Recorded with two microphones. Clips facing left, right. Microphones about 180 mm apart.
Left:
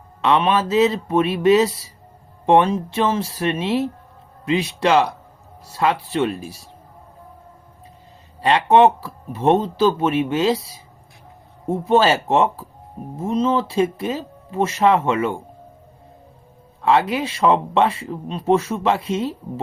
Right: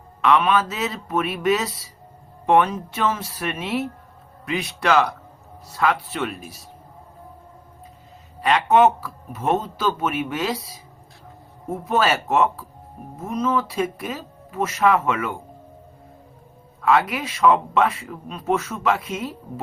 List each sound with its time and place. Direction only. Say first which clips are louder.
0.2 s speech: left 1 dB; 25° left (ahead or behind)
8.4 s speech: left 3 dB; 30° left (ahead or behind)
16.8 s speech: left 2 dB; 30° left (ahead or behind)